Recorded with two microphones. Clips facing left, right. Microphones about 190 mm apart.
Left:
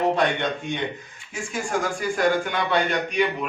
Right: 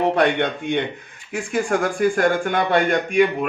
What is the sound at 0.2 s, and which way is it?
Speech, 60° right (ahead or behind).